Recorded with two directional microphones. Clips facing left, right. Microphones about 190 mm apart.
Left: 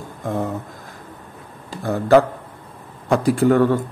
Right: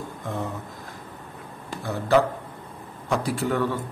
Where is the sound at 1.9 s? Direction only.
50° left (ahead or behind).